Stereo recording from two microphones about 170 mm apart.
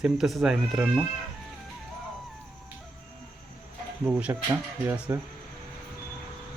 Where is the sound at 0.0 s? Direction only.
Centre (ahead or behind).